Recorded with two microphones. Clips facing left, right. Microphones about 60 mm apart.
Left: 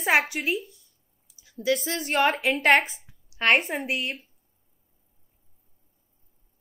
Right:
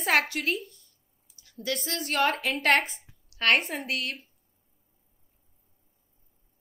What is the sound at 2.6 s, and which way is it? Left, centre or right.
Speech, centre.